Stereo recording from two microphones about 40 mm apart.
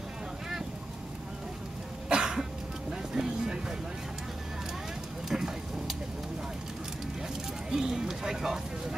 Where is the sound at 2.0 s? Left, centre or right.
Centre.